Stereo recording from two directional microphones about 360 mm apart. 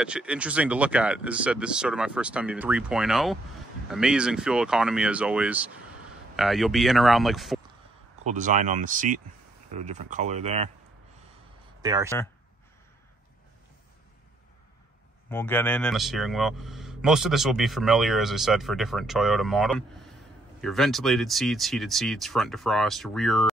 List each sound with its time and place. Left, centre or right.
0.0 s speech: centre
8.3 s speech: right
11.8 s speech: centre
15.2 s speech: centre